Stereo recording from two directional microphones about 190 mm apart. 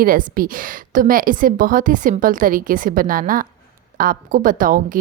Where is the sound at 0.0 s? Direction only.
50° right (ahead or behind).